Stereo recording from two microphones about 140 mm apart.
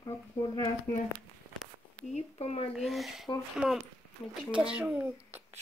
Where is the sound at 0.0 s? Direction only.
30° left (ahead or behind).